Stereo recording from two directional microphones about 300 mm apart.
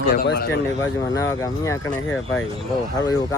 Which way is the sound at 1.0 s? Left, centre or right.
Centre.